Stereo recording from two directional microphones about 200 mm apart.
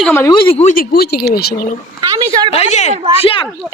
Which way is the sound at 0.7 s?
50° left (ahead or behind).